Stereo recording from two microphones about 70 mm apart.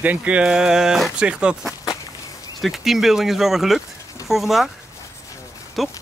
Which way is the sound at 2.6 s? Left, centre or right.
Centre.